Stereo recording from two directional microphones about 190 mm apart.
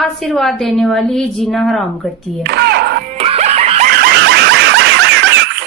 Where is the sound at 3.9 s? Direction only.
55° right (ahead or behind).